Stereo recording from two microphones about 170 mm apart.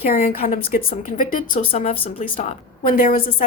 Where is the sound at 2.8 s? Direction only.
55° left (ahead or behind).